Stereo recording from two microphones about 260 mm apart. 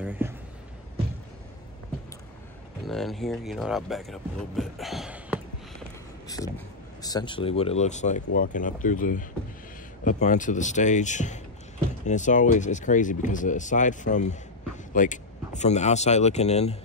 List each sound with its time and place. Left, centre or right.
0.0 s a sound: centre
2.8 s speech: centre
6.2 s speech: centre